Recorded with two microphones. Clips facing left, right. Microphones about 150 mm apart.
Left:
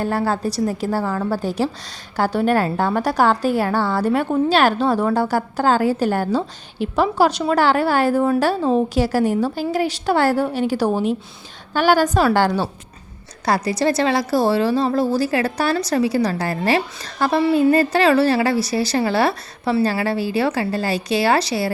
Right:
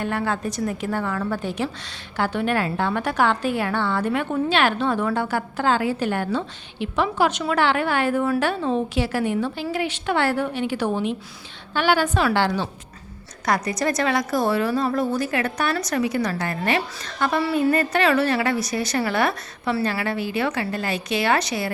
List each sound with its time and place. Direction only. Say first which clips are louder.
0.0 s a woman's voice: left 4 dB; 35° left (ahead or behind)
13.4 s a woman's voice: left 4 dB; 30° left (ahead or behind)